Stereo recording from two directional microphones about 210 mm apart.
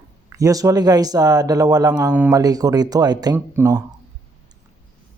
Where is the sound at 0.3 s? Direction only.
15° right (ahead or behind).